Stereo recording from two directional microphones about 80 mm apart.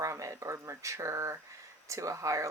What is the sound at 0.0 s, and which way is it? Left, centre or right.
Speech, right.